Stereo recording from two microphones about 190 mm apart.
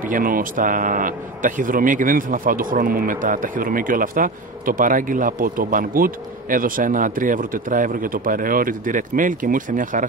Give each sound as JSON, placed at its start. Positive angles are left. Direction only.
{"t": 0.0, "sound": "speech", "side_deg": -45}